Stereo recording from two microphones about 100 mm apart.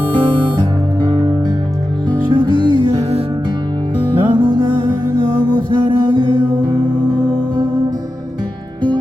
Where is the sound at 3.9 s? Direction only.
50° right (ahead or behind).